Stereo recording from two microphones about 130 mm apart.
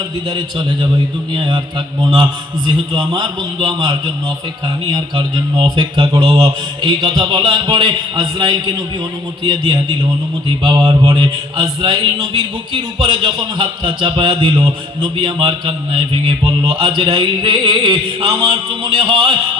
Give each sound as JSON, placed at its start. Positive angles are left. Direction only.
{"t": 0.3, "sound": "mantra", "side_deg": -40}